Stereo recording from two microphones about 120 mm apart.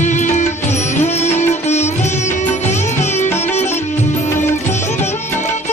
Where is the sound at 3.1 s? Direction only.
65° left (ahead or behind).